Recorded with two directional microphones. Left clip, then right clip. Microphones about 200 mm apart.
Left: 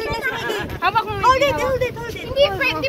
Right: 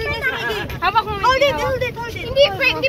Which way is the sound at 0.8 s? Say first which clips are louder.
Right 2 dB; 55° left (ahead or behind).